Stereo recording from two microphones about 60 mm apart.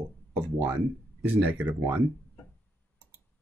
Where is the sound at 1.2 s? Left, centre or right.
Right.